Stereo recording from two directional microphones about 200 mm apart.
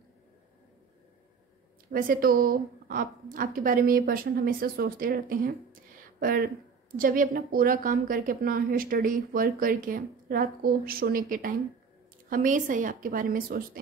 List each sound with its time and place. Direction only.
1.9 s a woman's voice: 45° right (ahead or behind)